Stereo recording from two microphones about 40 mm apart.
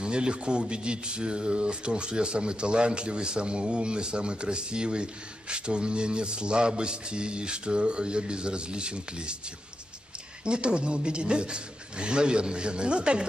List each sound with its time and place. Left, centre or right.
0.0 s speech: right
10.4 s speech: right